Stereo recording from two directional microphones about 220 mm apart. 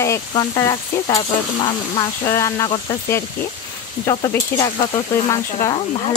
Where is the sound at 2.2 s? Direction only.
15° left (ahead or behind).